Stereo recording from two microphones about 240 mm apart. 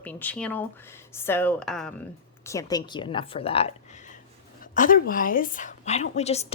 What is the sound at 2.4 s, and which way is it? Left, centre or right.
A woman's voice, centre.